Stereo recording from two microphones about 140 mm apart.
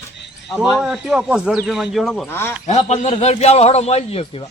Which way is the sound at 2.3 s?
15° left (ahead or behind).